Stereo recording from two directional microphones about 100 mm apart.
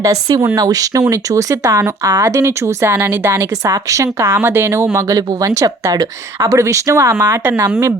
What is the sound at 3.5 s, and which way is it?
Speech, 35° right (ahead or behind).